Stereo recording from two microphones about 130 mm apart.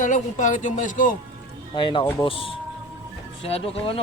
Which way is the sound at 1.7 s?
35° left (ahead or behind).